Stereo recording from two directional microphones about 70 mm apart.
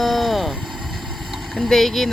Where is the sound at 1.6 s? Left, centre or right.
Centre.